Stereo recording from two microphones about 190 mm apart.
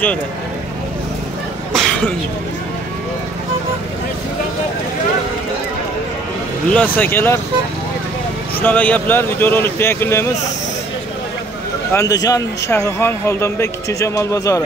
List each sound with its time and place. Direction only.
1.7 s a sound: 5° left (ahead or behind)
6.7 s speech: 10° left (ahead or behind)
8.5 s speech: 10° left (ahead or behind)
11.9 s speech: 15° left (ahead or behind)